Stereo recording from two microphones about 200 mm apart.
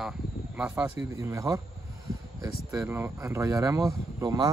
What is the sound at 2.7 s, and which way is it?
Speech, 10° right (ahead or behind).